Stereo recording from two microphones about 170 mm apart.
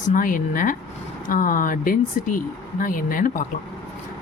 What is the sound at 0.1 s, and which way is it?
A woman's voice, 55° left (ahead or behind).